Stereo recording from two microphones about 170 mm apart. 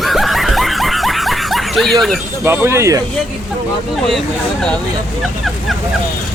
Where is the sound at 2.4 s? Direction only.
15° right (ahead or behind).